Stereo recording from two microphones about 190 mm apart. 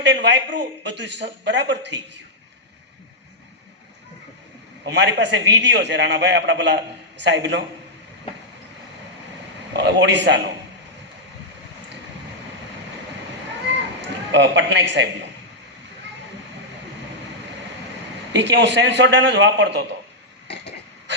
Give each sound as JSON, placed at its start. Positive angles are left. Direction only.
{"t": 0.0, "sound": "a man's voice", "side_deg": -70}
{"t": 4.9, "sound": "a man's voice", "side_deg": -65}
{"t": 9.7, "sound": "a man's voice", "side_deg": -65}
{"t": 14.0, "sound": "a man's voice", "side_deg": -70}
{"t": 18.3, "sound": "a man's voice", "side_deg": -65}